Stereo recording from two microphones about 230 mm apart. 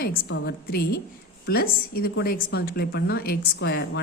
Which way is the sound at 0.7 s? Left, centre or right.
Left.